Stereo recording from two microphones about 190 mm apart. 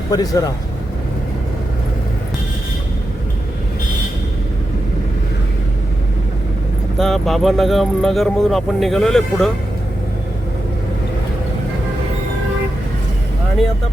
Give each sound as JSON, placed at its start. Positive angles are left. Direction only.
{"t": 0.1, "sound": "speech", "side_deg": 20}
{"t": 7.0, "sound": "speech", "side_deg": 0}